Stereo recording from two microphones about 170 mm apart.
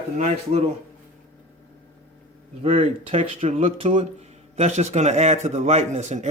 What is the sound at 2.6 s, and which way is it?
A man's voice, 35° right (ahead or behind).